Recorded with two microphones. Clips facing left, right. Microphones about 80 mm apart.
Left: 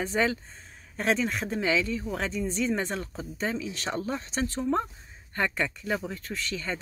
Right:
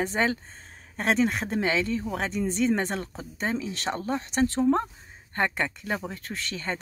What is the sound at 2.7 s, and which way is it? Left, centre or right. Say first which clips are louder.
Speech: right 2 dB; right.